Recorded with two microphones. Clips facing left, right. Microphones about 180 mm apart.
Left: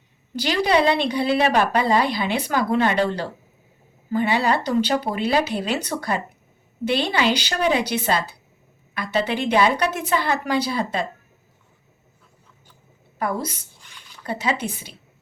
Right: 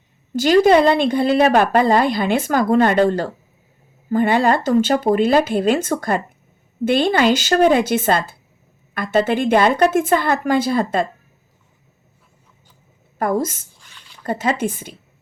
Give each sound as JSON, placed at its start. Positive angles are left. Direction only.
{"t": 0.3, "sound": "speech", "side_deg": -45}
{"t": 13.1, "sound": "speech", "side_deg": -45}